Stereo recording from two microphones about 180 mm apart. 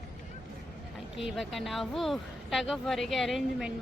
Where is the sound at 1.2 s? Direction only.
Centre (ahead or behind).